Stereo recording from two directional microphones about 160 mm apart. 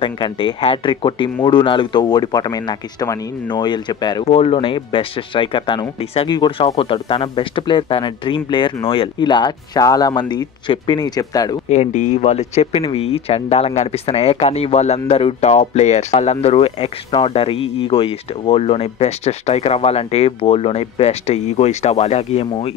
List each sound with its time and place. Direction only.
0.0 s speech: 30° left (ahead or behind)
4.3 s speech: 40° left (ahead or behind)
11.7 s speech: 50° left (ahead or behind)